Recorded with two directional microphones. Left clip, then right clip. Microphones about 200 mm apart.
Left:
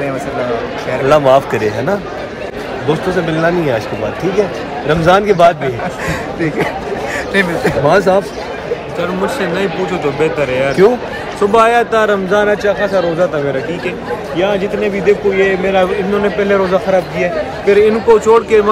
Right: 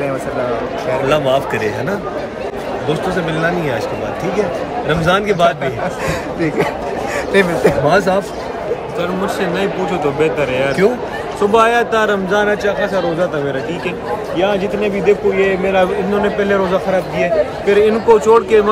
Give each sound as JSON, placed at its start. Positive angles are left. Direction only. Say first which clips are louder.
{"t": 1.0, "sound": "a man's voice", "louder": "left 7 dB", "side_deg": 5}
{"t": 6.0, "sound": "speech", "louder": "left 2 dB", "side_deg": -25}
{"t": 7.9, "sound": "a man's voice", "louder": "left 3 dB", "side_deg": 0}
{"t": 9.0, "sound": "a man's voice", "louder": "left 2 dB", "side_deg": -15}
{"t": 14.3, "sound": "a man's voice", "louder": "left 2 dB", "side_deg": -20}